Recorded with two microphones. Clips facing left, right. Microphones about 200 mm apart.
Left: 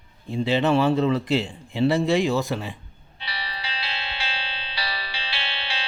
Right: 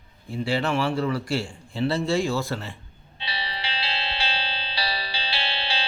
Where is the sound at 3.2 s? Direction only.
25° right (ahead or behind).